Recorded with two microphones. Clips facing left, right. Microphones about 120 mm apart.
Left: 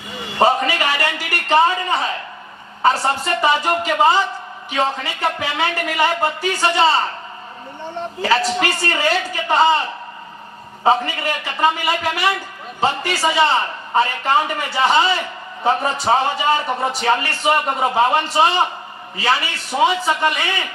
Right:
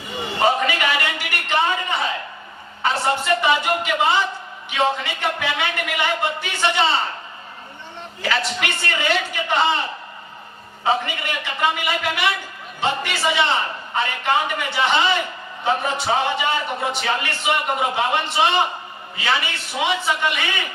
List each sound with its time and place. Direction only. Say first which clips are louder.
0.3 s a sound: left 3 dB; 40° left (ahead or behind)
2.8 s a man's voice: left 3 dB; 40° left (ahead or behind)
8.2 s a man's voice: left 5 dB; 35° left (ahead or behind)
10.8 s a man's voice: left 5 dB; 40° left (ahead or behind)